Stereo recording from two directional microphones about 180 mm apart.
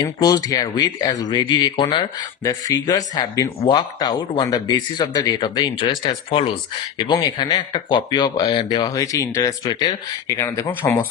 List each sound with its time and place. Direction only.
0.0 s speech: 20° left (ahead or behind)